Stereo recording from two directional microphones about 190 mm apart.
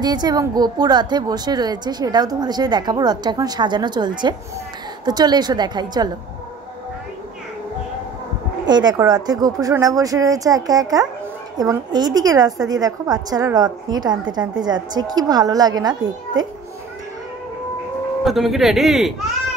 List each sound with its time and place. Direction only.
0.0 s a woman's voice: 20° right (ahead or behind)
8.6 s a woman's voice: 20° right (ahead or behind)
18.2 s speech: centre (ahead or behind)